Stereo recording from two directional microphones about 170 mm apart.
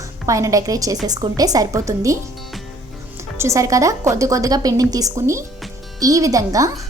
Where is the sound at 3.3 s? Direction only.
15° right (ahead or behind).